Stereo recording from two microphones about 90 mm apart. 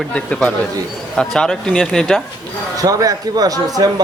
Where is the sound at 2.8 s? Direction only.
40° right (ahead or behind).